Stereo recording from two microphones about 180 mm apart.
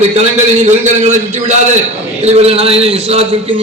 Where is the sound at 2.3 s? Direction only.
35° right (ahead or behind).